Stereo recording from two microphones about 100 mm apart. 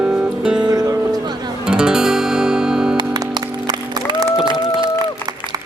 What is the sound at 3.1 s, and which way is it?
Music, 45° right (ahead or behind).